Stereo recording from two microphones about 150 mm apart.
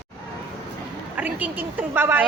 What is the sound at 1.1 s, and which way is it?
A woman's voice, 10° right (ahead or behind).